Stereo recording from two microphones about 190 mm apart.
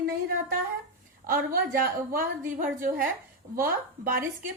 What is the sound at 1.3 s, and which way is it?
A woman's voice, 50° right (ahead or behind).